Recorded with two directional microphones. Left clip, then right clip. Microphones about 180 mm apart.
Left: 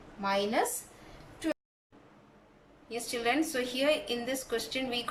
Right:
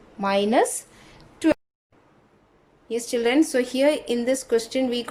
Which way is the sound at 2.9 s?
40° right (ahead or behind).